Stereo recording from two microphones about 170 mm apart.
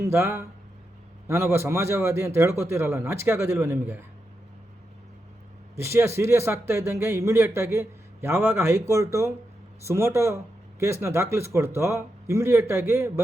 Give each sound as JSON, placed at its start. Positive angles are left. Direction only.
{"t": 0.0, "sound": "speech", "side_deg": -15}
{"t": 5.7, "sound": "speech", "side_deg": -15}